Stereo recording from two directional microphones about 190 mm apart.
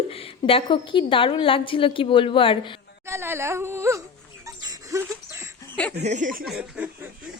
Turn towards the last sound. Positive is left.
turn(degrees=-5)  # may be behind; listen again after turning